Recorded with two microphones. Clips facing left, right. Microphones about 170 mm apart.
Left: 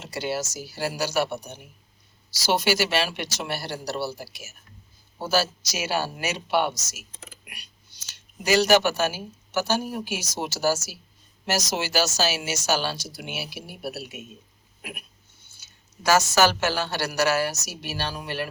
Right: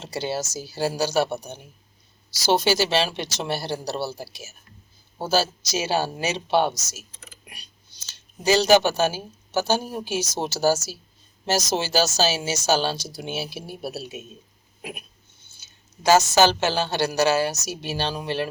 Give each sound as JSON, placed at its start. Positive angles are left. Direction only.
{"t": 0.0, "sound": "a woman's voice", "side_deg": -25}
{"t": 2.4, "sound": "a woman's voice", "side_deg": -25}
{"t": 8.1, "sound": "a woman's voice", "side_deg": -25}